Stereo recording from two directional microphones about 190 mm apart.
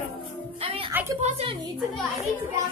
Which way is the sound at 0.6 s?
30° right (ahead or behind).